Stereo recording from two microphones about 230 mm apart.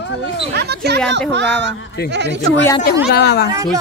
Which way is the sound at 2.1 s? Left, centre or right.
Right.